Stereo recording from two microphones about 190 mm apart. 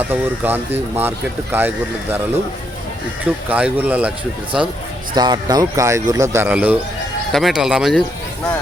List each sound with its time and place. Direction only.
0.0 s speech: 10° right (ahead or behind)
3.5 s speech: 10° right (ahead or behind)
5.1 s speech: 20° right (ahead or behind); by 8.0 s centre (ahead or behind)